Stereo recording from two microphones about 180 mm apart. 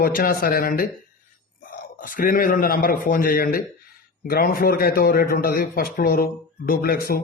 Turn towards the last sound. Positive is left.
turn(degrees=55)  # may be behind; listen again after turning